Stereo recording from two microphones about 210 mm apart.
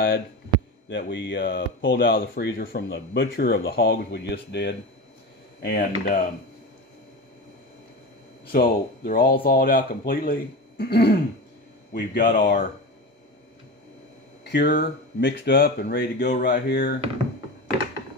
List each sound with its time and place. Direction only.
0.8 s speech: 60° left (ahead or behind)
8.5 s speech: 45° left (ahead or behind)
14.4 s speech: 50° left (ahead or behind)